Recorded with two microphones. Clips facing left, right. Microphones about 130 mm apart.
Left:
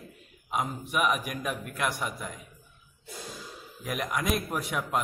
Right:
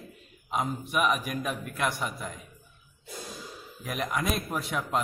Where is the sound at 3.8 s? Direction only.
10° left (ahead or behind).